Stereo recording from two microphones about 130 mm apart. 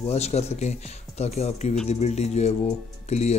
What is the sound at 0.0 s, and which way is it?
Speech, 55° left (ahead or behind).